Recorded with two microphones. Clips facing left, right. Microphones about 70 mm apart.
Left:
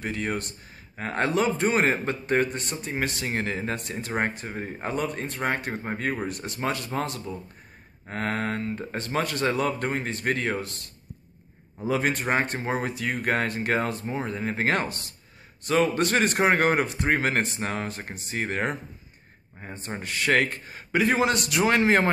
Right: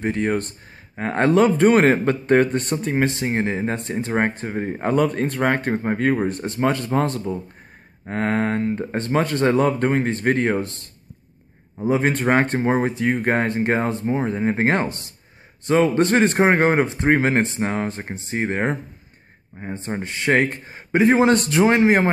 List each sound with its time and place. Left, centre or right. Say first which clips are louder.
0.0 s speech: right 8 dB; right
3.1 s speech: right 6 dB; right
21.7 s speech: right 4 dB; right